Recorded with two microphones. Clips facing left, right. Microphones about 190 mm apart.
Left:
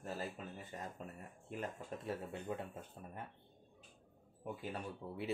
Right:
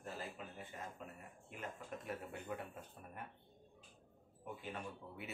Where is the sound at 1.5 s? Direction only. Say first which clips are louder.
Left 4 dB; 30° left (ahead or behind).